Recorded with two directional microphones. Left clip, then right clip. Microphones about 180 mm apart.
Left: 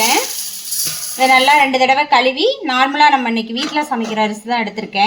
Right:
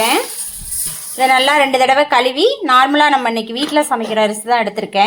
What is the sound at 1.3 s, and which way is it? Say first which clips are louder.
A woman's voice: left 2 dB; 35° right (ahead or behind).